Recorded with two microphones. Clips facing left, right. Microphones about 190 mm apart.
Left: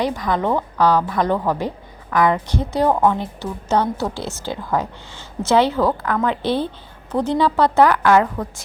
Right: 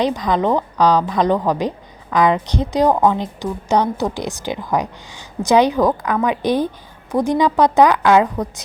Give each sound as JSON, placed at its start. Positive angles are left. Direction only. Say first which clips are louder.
{"t": 0.0, "sound": "a woman's voice", "louder": "right 3 dB", "side_deg": -20}